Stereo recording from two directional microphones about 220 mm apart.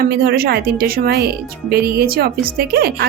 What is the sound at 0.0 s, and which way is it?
A woman's voice, 45° right (ahead or behind).